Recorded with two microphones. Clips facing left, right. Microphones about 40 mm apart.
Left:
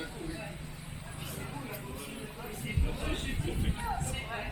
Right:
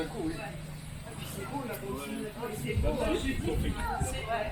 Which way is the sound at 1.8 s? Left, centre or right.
Centre.